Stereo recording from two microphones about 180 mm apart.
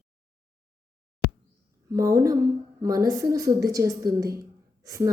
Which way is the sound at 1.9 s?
20° right (ahead or behind).